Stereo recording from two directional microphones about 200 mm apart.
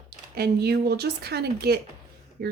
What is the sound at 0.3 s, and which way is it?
Speech, 55° right (ahead or behind).